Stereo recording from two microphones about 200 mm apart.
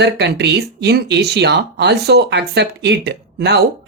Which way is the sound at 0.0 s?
60° right (ahead or behind).